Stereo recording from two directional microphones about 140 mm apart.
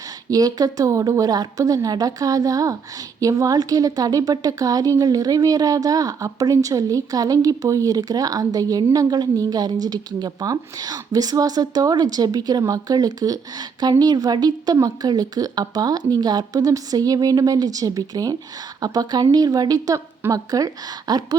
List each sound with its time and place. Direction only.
0.3 s a woman's voice: 25° right (ahead or behind)